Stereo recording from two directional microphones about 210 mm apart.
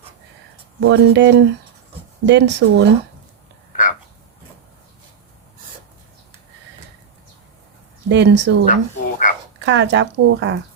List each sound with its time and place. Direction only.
0.8 s speech: 55° right (ahead or behind)
3.7 s a sound: 40° left (ahead or behind)
8.1 s speech: 55° right (ahead or behind)
8.7 s frog: 40° left (ahead or behind)
9.6 s speech: 60° right (ahead or behind)